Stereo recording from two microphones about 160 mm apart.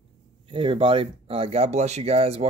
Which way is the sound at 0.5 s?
35° right (ahead or behind).